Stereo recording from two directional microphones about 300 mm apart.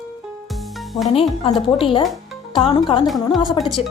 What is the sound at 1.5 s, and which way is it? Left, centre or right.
A woman's voice, centre.